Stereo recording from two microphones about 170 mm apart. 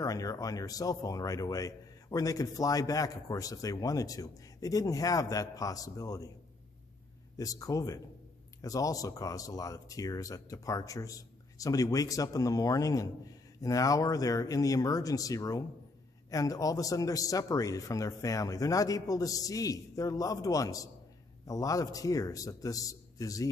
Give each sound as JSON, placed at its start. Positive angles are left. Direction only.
{"t": 0.0, "sound": "speech", "side_deg": 20}
{"t": 7.3, "sound": "speech", "side_deg": 20}